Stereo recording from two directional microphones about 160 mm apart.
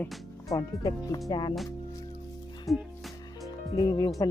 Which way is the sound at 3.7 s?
25° left (ahead or behind).